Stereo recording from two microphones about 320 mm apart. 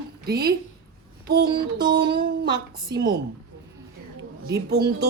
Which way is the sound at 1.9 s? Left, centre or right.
Right.